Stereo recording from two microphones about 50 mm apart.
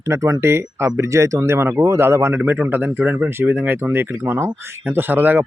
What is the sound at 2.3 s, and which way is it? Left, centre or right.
Speech, right.